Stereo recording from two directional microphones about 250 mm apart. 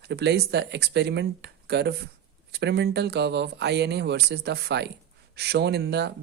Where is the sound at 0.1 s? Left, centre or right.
Right.